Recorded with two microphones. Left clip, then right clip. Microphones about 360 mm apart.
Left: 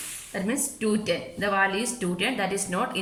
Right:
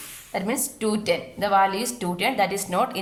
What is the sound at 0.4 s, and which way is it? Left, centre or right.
A woman's voice, centre.